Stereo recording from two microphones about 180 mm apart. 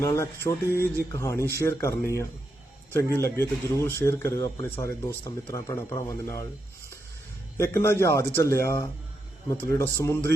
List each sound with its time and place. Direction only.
0.0 s speech: 15° left (ahead or behind)
7.5 s speech: 15° left (ahead or behind)